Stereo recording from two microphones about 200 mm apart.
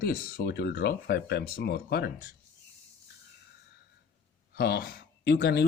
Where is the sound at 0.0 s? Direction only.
50° left (ahead or behind).